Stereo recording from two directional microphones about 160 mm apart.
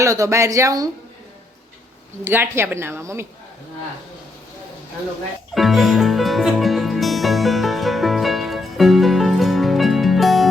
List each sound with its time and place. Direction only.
0.0 s speech: 20° right (ahead or behind)
2.3 s a woman's voice: 15° right (ahead or behind)
5.5 s music: centre (ahead or behind)